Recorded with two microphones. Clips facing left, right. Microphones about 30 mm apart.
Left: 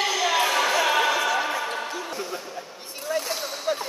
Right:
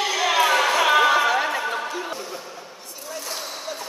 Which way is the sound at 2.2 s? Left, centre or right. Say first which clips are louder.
Left 2 dB; centre.